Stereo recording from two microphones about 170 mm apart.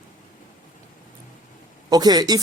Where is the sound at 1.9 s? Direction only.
25° right (ahead or behind).